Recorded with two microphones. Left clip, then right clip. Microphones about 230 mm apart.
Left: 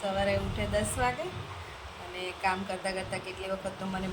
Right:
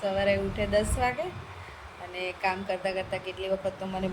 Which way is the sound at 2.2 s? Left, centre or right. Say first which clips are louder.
Right 1 dB; centre.